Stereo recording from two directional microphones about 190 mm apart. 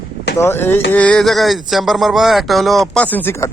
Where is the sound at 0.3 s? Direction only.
10° left (ahead or behind).